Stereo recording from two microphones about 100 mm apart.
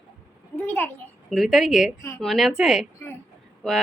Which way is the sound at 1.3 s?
5° right (ahead or behind).